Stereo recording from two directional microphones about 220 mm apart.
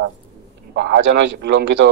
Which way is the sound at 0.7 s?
50° right (ahead or behind).